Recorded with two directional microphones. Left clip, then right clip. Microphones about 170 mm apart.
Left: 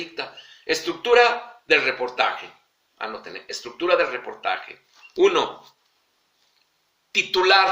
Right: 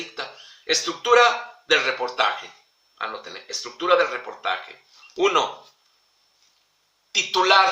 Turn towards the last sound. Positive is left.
turn(degrees=5)  # may be behind; listen again after turning